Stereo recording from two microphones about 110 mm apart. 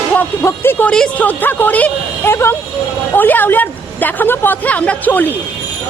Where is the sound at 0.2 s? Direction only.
20° left (ahead or behind).